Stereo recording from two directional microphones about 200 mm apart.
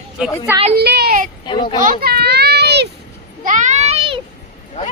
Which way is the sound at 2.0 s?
50° right (ahead or behind).